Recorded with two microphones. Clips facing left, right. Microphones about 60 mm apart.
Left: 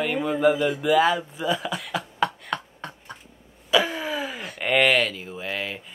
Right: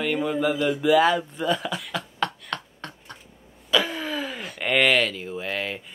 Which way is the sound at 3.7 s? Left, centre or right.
Centre.